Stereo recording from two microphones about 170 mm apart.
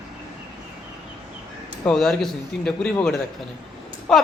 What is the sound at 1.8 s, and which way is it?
A man's voice, centre (ahead or behind).